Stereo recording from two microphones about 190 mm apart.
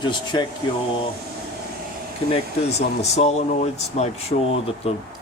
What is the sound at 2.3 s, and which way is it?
Speech, 35° left (ahead or behind).